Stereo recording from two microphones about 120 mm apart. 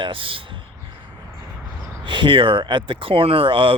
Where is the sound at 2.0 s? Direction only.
45° right (ahead or behind).